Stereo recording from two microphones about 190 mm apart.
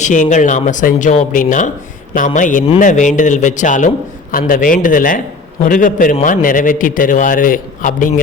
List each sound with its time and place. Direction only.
0.0 s a man's voice: 40° left (ahead or behind)